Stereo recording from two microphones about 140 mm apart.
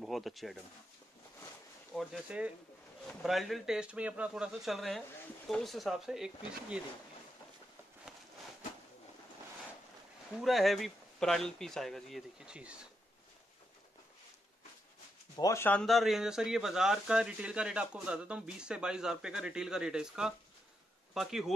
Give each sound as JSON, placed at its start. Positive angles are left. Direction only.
{"t": 0.0, "sound": "speech", "side_deg": 0}
{"t": 2.0, "sound": "speech", "side_deg": -5}
{"t": 10.3, "sound": "speech", "side_deg": 0}
{"t": 15.3, "sound": "speech", "side_deg": 20}
{"t": 15.7, "sound": "speech", "side_deg": 0}